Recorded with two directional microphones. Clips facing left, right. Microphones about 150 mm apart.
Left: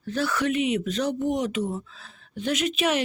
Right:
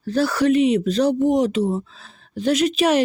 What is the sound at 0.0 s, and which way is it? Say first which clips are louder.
Speech: right 7 dB; 35° right (ahead or behind).